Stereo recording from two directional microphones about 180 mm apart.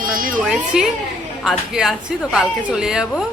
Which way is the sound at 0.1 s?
50° right (ahead or behind).